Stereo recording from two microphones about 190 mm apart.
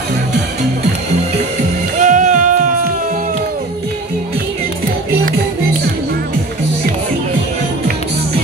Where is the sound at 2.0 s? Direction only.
40° right (ahead or behind).